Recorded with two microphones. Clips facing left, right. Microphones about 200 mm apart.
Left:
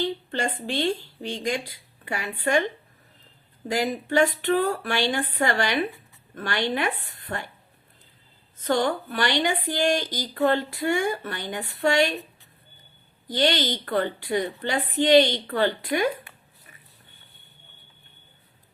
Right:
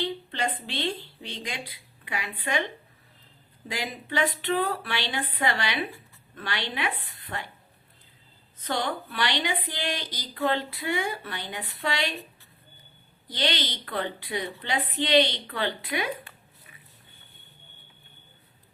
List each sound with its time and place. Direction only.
0.0 s a sound: 45° left (ahead or behind)
0.7 s a woman's voice: 45° left (ahead or behind)
3.7 s a woman's voice: 45° left (ahead or behind)
8.6 s a woman's voice: 45° left (ahead or behind)
13.2 s a woman's voice: 45° left (ahead or behind)